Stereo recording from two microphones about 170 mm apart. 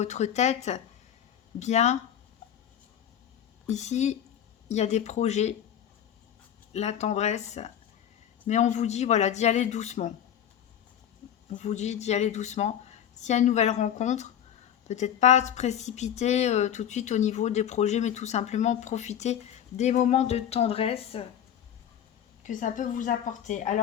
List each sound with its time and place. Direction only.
0.0 s speech: 40° left (ahead or behind)
3.7 s speech: 40° left (ahead or behind)
6.7 s speech: 40° left (ahead or behind)
11.5 s a woman's voice: 40° left (ahead or behind)
22.4 s a woman's voice: 50° left (ahead or behind)